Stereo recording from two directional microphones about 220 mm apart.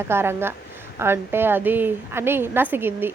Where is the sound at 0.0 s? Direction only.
10° right (ahead or behind).